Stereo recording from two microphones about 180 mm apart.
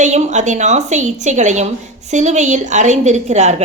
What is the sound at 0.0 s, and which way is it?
A woman's voice, 40° right (ahead or behind).